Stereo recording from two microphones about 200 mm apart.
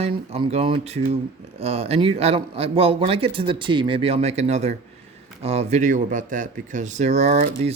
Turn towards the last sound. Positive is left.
turn(degrees=-35)  # may be behind; listen again after turning